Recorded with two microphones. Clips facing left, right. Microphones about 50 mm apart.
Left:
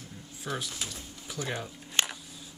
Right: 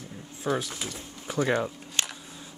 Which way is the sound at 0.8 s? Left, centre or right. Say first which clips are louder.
Right 5 dB; right.